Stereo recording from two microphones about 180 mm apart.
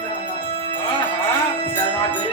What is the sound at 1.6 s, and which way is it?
Music, 30° left (ahead or behind).